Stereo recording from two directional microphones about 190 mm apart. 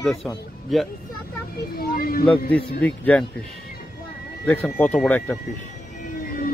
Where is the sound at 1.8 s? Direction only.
50° left (ahead or behind).